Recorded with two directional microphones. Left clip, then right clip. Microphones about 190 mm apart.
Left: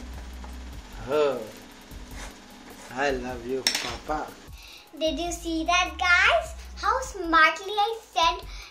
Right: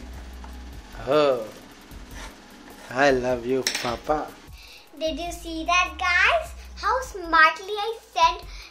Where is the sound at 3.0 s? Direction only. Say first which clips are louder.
Right 7 dB; 60° right (ahead or behind).